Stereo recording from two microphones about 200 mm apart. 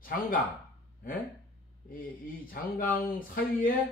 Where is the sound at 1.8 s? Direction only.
45° left (ahead or behind).